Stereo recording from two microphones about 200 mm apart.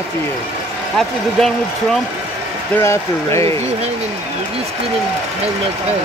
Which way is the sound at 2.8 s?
15° left (ahead or behind).